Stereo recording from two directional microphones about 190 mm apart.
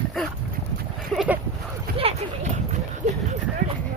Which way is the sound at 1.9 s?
50° right (ahead or behind).